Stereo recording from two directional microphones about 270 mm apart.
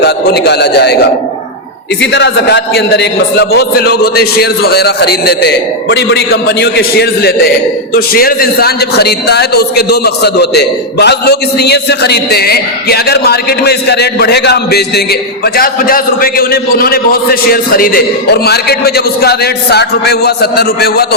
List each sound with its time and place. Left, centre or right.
0.0 s a man's voice: left
2.0 s a man's voice: left